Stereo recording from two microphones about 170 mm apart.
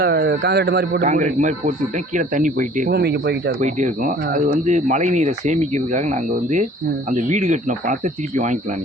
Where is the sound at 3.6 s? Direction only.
45° right (ahead or behind).